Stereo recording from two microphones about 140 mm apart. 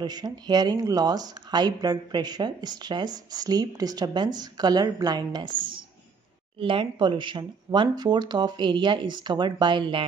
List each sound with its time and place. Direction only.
0.0 s speech: 30° right (ahead or behind)